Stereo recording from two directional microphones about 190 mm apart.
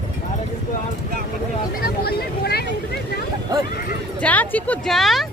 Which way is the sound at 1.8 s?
55° left (ahead or behind).